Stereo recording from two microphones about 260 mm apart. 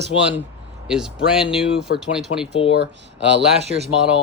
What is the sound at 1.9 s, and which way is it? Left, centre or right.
Speech, left.